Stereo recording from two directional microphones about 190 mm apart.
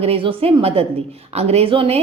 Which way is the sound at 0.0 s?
30° right (ahead or behind).